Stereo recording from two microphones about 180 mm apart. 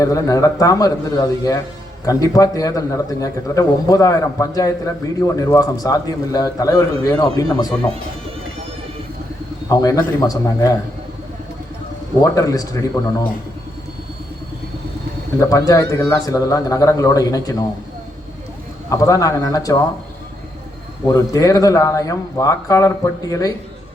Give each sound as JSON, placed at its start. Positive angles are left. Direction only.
{"t": 0.0, "sound": "a man's voice", "side_deg": 20}
{"t": 9.6, "sound": "a man's voice", "side_deg": 20}
{"t": 12.2, "sound": "a man's voice", "side_deg": 20}
{"t": 15.4, "sound": "a man's voice", "side_deg": 20}
{"t": 18.9, "sound": "a man's voice", "side_deg": 20}
{"t": 21.1, "sound": "a man's voice", "side_deg": 20}